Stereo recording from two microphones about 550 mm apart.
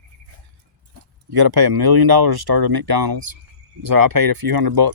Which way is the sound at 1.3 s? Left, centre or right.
Right.